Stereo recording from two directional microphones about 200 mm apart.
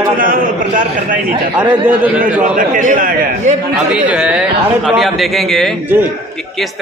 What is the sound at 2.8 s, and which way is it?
Speech, 40° right (ahead or behind).